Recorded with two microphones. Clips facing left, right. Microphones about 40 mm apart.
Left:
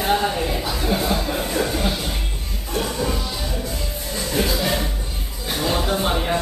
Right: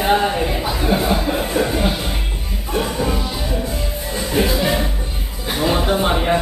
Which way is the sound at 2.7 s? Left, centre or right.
Centre.